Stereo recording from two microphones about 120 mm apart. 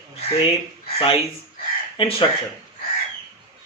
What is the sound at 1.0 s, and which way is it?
A man's voice, 50° left (ahead or behind).